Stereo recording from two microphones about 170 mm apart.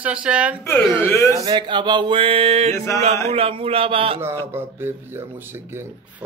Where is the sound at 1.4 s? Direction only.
25° right (ahead or behind).